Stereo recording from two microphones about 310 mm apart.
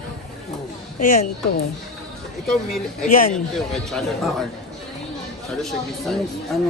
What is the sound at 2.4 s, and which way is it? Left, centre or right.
Speech, centre.